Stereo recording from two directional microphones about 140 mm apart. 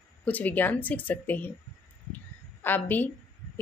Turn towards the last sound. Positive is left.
turn(degrees=15)  # may be behind; listen again after turning